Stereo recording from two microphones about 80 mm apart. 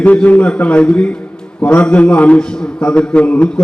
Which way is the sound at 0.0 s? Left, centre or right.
Centre.